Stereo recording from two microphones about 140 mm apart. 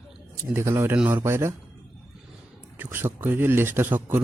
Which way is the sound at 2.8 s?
15° right (ahead or behind).